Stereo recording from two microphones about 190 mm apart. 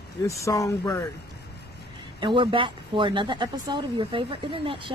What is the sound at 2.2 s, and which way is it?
Speech, 25° right (ahead or behind).